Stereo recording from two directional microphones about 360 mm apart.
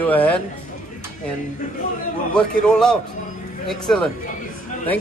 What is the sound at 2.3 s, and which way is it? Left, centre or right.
A man's voice, centre.